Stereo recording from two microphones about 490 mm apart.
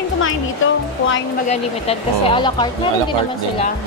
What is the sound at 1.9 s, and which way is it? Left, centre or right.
A woman's voice, centre.